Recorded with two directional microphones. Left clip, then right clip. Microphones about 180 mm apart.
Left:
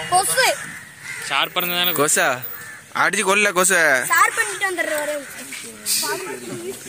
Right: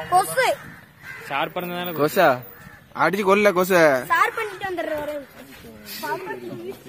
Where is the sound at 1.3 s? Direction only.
50° right (ahead or behind).